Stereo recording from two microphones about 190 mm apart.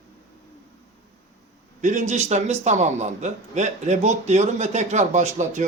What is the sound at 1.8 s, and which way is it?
A man's voice, 40° right (ahead or behind).